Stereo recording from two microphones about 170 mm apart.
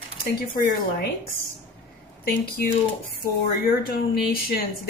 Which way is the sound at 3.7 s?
60° left (ahead or behind).